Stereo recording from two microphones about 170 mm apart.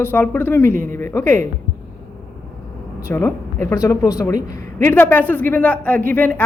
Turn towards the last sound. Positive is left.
turn(degrees=10)  # may be behind; listen again after turning